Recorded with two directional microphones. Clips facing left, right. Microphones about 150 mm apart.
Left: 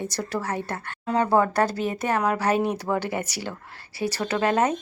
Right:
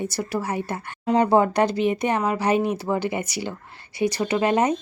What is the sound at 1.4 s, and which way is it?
Speech, 15° right (ahead or behind).